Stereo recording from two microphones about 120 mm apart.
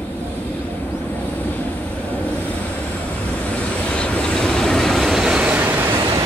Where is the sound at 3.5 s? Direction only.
10° left (ahead or behind); by 6.2 s 20° right (ahead or behind).